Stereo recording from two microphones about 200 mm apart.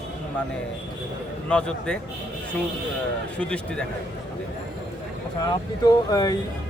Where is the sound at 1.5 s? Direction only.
5° left (ahead or behind).